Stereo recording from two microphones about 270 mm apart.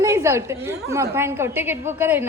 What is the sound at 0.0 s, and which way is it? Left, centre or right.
A woman's voice, centre.